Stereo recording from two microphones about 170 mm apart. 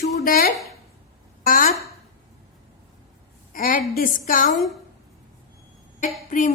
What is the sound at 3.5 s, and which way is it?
A woman's voice, 55° left (ahead or behind).